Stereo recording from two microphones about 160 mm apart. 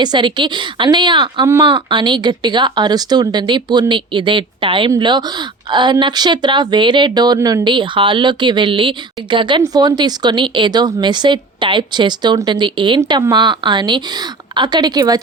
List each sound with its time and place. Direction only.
0.0 s speech: 30° right (ahead or behind)